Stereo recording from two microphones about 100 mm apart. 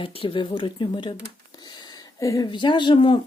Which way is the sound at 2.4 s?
50° left (ahead or behind).